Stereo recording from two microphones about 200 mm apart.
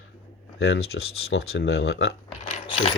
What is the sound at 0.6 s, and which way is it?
Speech, 85° left.